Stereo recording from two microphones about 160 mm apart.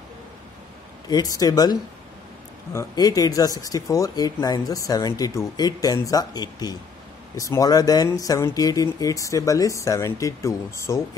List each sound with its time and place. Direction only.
1.0 s speech: 25° left (ahead or behind)